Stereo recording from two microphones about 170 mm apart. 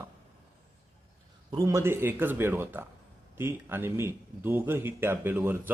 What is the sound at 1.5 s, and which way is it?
A man's voice, 20° right (ahead or behind).